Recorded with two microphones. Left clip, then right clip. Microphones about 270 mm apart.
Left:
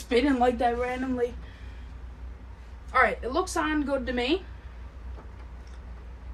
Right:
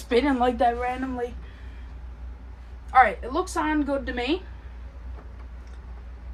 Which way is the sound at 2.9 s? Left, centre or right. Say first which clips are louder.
Right 4 dB; centre.